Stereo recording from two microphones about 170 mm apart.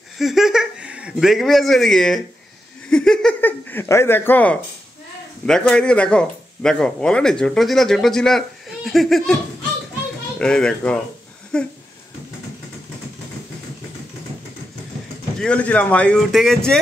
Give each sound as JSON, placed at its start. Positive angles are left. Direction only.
{"t": 0.2, "sound": "speech", "side_deg": 0}
{"t": 10.4, "sound": "speech", "side_deg": 5}
{"t": 15.4, "sound": "speech", "side_deg": 5}